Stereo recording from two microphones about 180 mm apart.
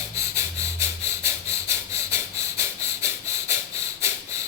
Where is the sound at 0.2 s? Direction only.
15° right (ahead or behind).